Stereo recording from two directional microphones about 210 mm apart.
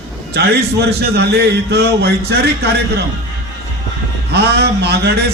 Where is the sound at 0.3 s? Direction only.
50° right (ahead or behind).